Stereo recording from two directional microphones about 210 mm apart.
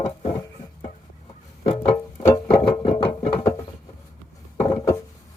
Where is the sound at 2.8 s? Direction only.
25° left (ahead or behind).